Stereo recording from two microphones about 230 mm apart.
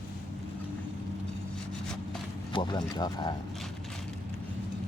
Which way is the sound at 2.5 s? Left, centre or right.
Centre.